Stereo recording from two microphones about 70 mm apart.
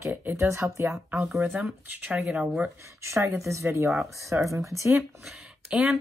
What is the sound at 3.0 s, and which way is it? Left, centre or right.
Speech, right.